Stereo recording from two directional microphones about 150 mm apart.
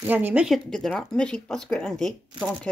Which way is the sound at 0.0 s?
10° right (ahead or behind).